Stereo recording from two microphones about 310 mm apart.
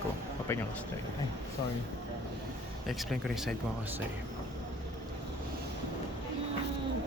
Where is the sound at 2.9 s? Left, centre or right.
Centre.